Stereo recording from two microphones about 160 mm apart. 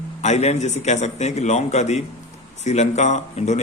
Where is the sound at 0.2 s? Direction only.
45° left (ahead or behind).